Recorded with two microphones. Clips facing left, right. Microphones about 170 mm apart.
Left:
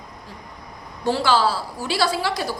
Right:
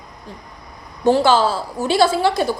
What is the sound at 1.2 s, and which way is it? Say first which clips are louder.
Speech: right 4 dB; 20° right (ahead or behind).